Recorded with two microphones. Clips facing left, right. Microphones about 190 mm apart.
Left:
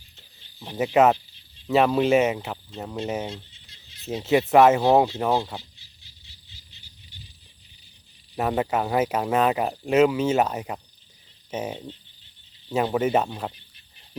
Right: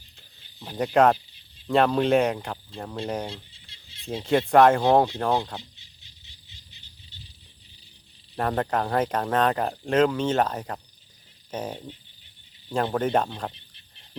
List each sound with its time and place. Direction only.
0.6 s speech: 5° left (ahead or behind)
3.5 s a sound: 30° right (ahead or behind)
4.0 s speech: 5° left (ahead or behind)
8.4 s speech: 5° left (ahead or behind)